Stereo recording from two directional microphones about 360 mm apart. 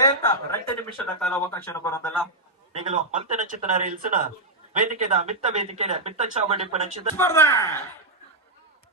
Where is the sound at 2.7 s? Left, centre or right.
Centre.